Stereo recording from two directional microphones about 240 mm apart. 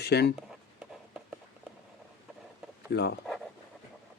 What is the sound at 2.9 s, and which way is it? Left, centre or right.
Speech, left.